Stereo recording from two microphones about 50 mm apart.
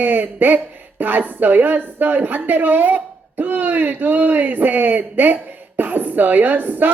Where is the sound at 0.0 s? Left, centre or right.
Right.